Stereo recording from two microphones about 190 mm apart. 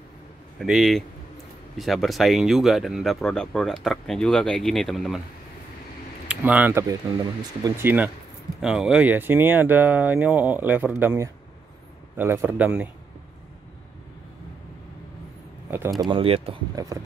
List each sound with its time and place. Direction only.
0.6 s speech: centre (ahead or behind)
6.2 s speech: 10° right (ahead or behind)
16.1 s speech: 30° right (ahead or behind)
16.7 s speech: 20° right (ahead or behind)